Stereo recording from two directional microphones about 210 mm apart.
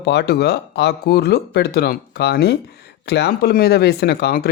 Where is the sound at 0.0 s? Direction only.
55° left (ahead or behind).